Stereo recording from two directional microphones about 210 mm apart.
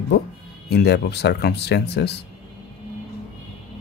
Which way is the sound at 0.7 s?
50° left (ahead or behind).